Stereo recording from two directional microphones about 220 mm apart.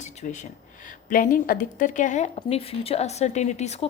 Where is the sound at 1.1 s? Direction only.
40° left (ahead or behind).